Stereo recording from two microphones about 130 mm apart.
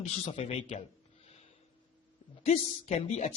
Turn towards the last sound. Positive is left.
turn(degrees=55)  # may be behind; listen again after turning